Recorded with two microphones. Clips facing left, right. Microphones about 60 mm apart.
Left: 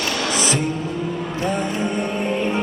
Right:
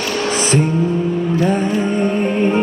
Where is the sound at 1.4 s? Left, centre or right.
Right.